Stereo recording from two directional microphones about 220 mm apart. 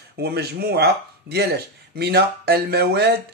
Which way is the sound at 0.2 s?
45° right (ahead or behind).